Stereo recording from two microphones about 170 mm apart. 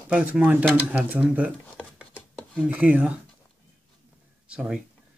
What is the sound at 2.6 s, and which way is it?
Speech, 10° right (ahead or behind).